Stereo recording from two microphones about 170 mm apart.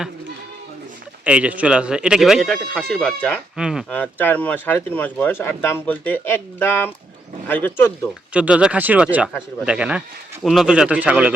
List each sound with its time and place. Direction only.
1.2 s speech: 10° right (ahead or behind)
3.9 s speech: 10° left (ahead or behind)
8.3 s speech: 5° right (ahead or behind)